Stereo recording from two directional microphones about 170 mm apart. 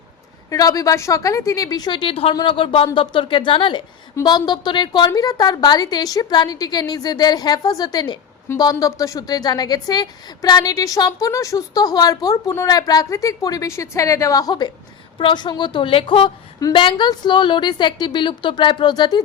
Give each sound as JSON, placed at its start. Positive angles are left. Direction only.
{"t": 0.5, "sound": "a woman's voice", "side_deg": 20}